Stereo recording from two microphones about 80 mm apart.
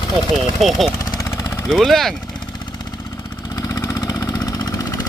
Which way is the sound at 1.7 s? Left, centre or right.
Centre.